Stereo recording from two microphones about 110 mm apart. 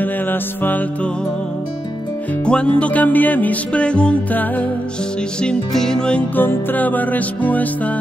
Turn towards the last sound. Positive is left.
turn(degrees=15)  # may be behind; listen again after turning